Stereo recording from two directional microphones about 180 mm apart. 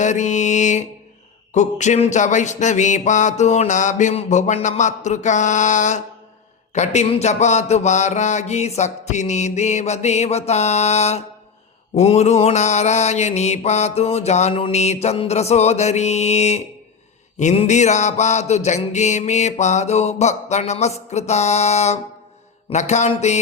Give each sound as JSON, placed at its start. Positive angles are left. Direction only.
{"t": 0.0, "sound": "mantra", "side_deg": 40}